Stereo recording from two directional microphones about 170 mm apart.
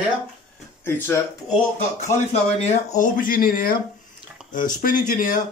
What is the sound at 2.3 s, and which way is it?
Speech, 45° left (ahead or behind).